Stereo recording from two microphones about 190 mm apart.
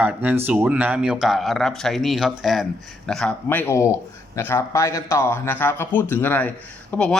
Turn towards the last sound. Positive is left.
turn(degrees=10)  # may be behind; listen again after turning